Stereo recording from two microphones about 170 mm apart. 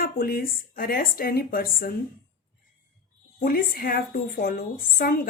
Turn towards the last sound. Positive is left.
turn(degrees=60)  # may be behind; listen again after turning